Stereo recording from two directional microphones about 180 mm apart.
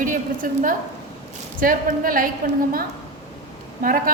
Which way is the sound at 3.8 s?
50° right (ahead or behind).